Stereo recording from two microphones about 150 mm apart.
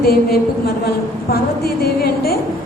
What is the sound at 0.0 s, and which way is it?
A woman's voice, 90° left.